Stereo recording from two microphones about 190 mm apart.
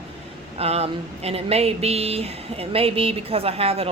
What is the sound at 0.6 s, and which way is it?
Speech, 30° right (ahead or behind).